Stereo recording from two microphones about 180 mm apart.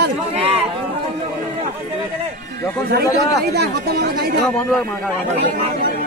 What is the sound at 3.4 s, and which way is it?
Speech, 60° right (ahead or behind).